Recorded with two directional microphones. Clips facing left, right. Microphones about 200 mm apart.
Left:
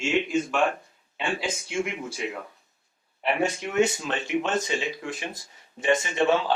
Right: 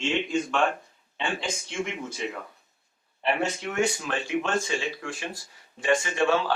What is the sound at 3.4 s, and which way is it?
A man's voice, 20° left (ahead or behind).